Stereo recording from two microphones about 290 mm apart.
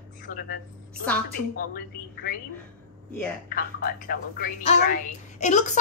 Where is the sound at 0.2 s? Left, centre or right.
Left.